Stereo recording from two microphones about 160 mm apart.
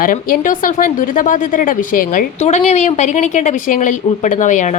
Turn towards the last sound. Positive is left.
turn(degrees=50)  # may be behind; listen again after turning